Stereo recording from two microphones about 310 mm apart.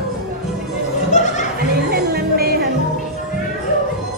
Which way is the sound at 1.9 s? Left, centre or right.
Right.